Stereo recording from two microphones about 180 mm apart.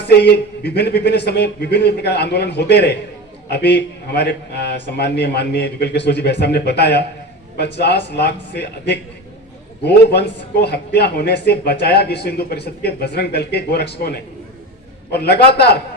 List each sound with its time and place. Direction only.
0.1 s a man's voice: 65° left (ahead or behind)